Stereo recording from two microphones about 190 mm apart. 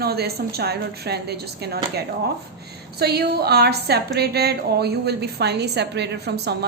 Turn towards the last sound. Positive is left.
turn(degrees=-60)  # may be behind; listen again after turning